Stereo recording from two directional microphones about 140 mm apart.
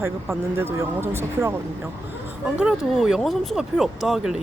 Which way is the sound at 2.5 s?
5° right (ahead or behind).